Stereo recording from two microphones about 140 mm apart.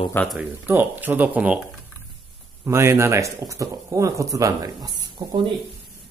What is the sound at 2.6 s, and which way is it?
Speech, 20° right (ahead or behind).